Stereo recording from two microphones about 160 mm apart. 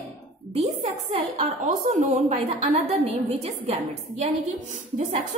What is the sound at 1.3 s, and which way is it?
A woman's voice, 45° right (ahead or behind).